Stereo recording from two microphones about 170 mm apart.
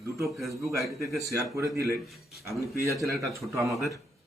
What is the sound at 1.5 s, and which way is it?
Speech, 15° right (ahead or behind).